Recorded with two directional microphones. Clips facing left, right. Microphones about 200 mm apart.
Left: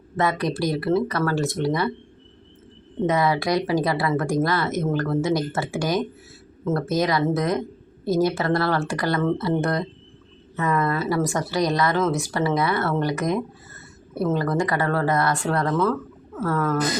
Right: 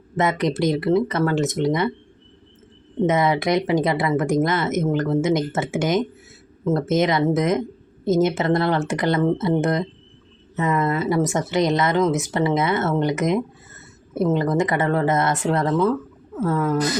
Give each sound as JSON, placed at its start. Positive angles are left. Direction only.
{"t": 0.2, "sound": "speech", "side_deg": -20}
{"t": 3.1, "sound": "speech", "side_deg": -20}